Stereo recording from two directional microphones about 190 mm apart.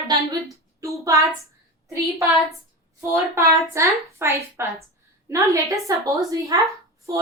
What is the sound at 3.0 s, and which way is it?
A woman's voice, 15° right (ahead or behind).